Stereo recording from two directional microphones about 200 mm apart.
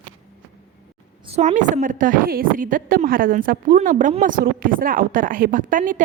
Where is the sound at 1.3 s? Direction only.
35° right (ahead or behind).